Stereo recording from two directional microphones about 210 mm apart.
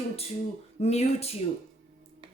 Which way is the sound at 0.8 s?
30° left (ahead or behind).